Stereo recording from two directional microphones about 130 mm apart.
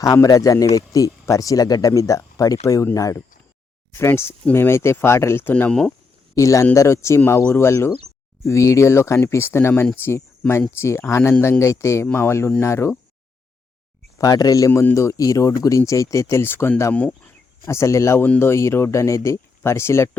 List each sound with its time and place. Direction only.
0.0 s speech: 25° left (ahead or behind); by 5.9 s 10° left (ahead or behind)
6.3 s speech: 25° left (ahead or behind)
14.2 s speech: 30° left (ahead or behind)